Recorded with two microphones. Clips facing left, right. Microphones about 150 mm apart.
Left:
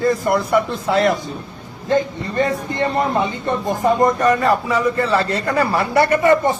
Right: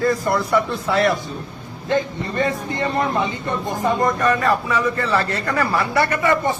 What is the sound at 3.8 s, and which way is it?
A man's voice, 35° left (ahead or behind).